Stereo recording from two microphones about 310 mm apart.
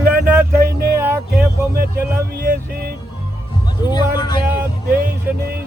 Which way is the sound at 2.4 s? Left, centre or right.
Right.